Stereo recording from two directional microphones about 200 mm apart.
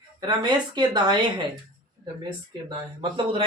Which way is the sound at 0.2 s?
20° right (ahead or behind).